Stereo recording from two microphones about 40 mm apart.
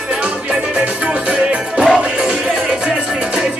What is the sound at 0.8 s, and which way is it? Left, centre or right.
Music, right.